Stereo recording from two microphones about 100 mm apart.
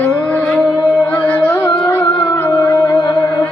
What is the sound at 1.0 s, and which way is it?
Carnatic music, 15° left (ahead or behind).